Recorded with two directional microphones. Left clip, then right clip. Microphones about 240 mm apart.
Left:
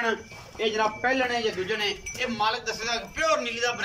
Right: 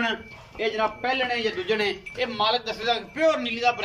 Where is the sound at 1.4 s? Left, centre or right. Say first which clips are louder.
Right 2 dB; centre.